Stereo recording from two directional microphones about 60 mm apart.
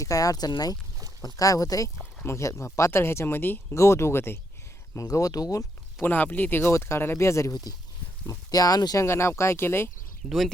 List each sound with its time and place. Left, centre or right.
0.0 s speech: left
1.2 s speech: left
2.2 s speech: left
3.8 s speech: left
4.9 s speech: left
6.0 s speech: left
6.7 s speech: left
8.3 s speech: left
9.0 s speech: left
10.2 s speech: centre